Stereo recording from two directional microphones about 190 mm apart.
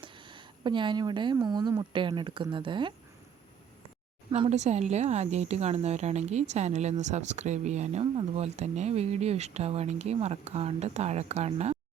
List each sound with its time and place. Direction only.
0.0 s speech: 25° right (ahead or behind)
4.3 s speech: 35° right (ahead or behind)